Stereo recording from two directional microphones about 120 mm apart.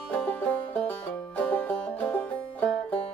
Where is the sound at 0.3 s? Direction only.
15° left (ahead or behind).